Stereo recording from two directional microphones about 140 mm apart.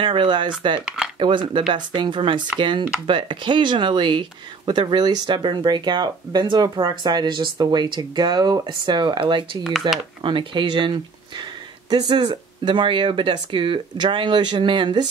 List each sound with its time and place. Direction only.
0.0 s speech: 35° right (ahead or behind)
0.8 s speech: 5° right (ahead or behind)
1.2 s speech: 35° right (ahead or behind)
9.6 s speech: centre (ahead or behind)
10.2 s speech: 35° right (ahead or behind)